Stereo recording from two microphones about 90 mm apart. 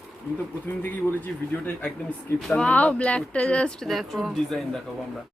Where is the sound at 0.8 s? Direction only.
25° left (ahead or behind); by 4.6 s centre (ahead or behind).